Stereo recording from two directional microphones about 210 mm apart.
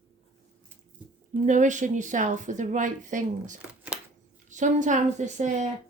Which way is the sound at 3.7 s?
5° right (ahead or behind).